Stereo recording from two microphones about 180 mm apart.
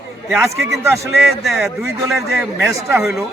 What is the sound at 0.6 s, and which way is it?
Speech, 15° right (ahead or behind).